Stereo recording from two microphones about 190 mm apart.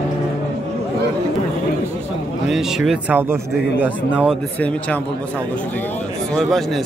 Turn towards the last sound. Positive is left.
turn(degrees=0)  # may be behind; listen again after turning